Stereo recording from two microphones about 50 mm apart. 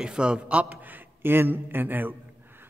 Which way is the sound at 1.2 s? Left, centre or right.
Right.